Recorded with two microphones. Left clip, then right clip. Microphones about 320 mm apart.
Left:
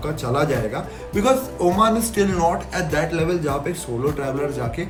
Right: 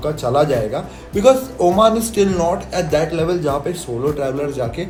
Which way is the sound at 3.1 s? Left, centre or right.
Right.